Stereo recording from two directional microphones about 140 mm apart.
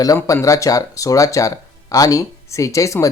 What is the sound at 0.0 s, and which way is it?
Speech, 25° left (ahead or behind).